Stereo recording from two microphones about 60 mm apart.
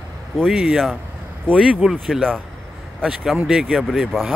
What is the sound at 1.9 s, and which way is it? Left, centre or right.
Speech, centre.